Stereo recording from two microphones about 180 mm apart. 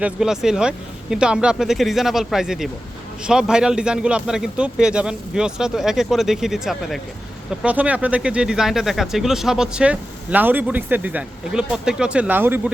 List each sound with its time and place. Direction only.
0.0 s speech: 5° right (ahead or behind)